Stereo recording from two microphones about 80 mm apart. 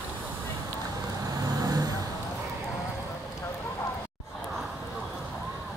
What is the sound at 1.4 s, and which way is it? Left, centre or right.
Vehicle, right.